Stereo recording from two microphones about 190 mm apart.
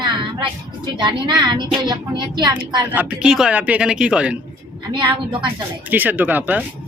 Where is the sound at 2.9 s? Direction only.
5° right (ahead or behind).